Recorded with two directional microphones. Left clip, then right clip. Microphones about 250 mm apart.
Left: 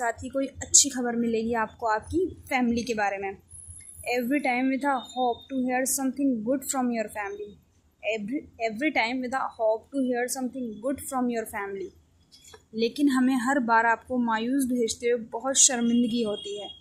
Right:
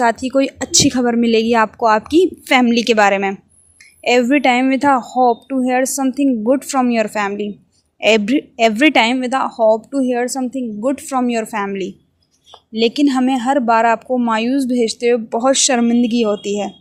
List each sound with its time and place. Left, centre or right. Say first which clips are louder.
0.0 s speech: right 14 dB; right